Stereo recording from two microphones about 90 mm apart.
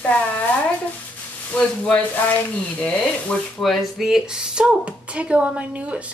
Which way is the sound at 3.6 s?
5° left (ahead or behind).